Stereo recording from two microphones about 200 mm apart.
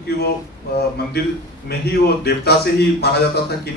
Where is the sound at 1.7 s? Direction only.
50° left (ahead or behind).